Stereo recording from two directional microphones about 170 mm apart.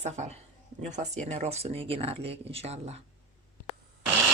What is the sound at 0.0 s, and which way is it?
Speech, 40° right (ahead or behind).